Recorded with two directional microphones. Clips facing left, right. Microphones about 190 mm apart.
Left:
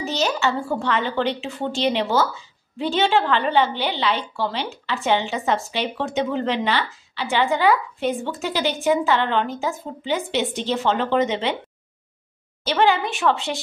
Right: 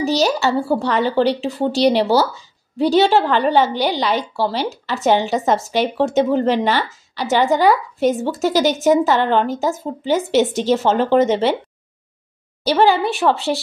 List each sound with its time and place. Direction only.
0.0 s a woman's voice: 35° right (ahead or behind)
12.6 s a woman's voice: 35° right (ahead or behind)